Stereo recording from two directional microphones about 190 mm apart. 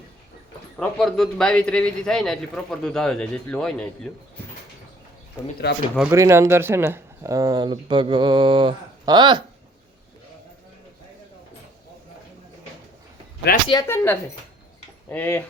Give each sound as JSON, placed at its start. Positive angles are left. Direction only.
{"t": 0.8, "sound": "a man's voice", "side_deg": 0}
{"t": 6.0, "sound": "speech", "side_deg": -15}
{"t": 13.5, "sound": "speech", "side_deg": 55}
{"t": 13.8, "sound": "speech", "side_deg": 10}